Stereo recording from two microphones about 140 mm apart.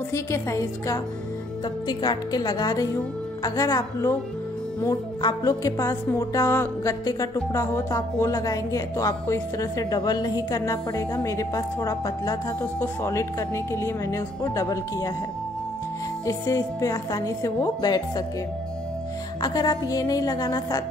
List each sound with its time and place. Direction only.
0.1 s speech: 20° left (ahead or behind)
16.3 s speech: 20° left (ahead or behind)
19.4 s speech: 30° left (ahead or behind)